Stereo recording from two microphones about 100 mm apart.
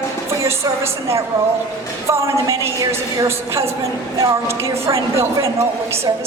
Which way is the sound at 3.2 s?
25° right (ahead or behind).